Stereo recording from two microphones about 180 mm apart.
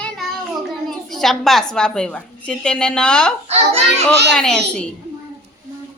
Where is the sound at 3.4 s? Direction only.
35° right (ahead or behind).